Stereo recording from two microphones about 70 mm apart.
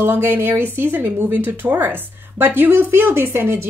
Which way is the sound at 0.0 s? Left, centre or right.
Right.